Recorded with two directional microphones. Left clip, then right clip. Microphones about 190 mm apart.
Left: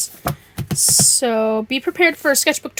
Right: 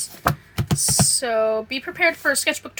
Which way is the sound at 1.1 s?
40° left (ahead or behind).